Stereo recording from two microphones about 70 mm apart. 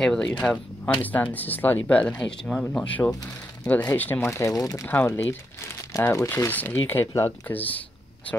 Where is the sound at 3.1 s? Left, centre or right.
Left.